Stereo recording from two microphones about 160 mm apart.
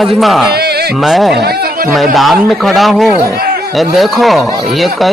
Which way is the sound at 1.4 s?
80° right.